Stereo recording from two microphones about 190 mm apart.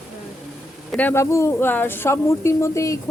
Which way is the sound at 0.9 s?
10° left (ahead or behind).